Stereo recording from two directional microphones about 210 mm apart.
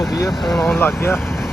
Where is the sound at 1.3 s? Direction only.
Centre (ahead or behind).